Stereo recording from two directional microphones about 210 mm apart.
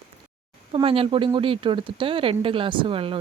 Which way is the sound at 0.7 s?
25° right (ahead or behind).